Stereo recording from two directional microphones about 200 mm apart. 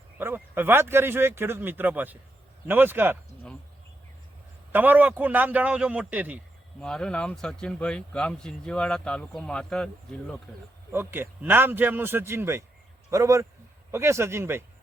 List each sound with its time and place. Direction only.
0.2 s speech: 10° right (ahead or behind)
4.7 s speech: 10° right (ahead or behind)
6.8 s speech: 5° left (ahead or behind)
10.9 s speech: 10° right (ahead or behind)